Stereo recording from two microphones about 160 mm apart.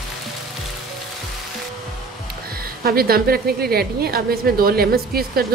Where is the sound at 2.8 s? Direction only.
70° right (ahead or behind).